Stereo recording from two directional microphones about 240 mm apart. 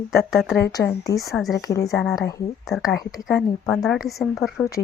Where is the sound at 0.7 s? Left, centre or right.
Centre.